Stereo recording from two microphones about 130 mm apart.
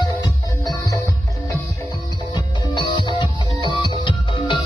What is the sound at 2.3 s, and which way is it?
Music, 35° left (ahead or behind).